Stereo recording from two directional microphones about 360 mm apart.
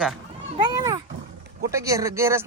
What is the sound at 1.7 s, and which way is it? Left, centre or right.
Speech, centre.